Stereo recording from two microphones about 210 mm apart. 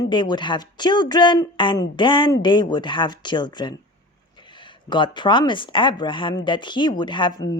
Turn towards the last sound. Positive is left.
turn(degrees=20)  # may be behind; listen again after turning